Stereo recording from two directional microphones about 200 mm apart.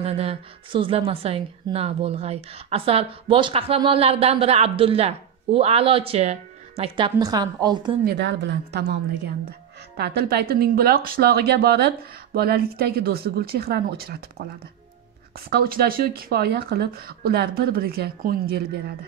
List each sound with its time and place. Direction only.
0.0 s a woman's voice: 30° right (ahead or behind)
7.2 s a woman's voice: 20° right (ahead or behind)
8.0 s a woman's voice: 55° right (ahead or behind)
9.9 s speech: 55° right (ahead or behind)
15.5 s speech: 50° right (ahead or behind)